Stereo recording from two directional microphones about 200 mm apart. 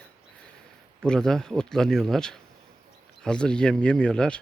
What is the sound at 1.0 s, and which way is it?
Speech, 5° left (ahead or behind).